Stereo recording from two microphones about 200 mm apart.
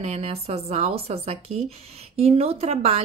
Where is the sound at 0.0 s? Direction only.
30° right (ahead or behind).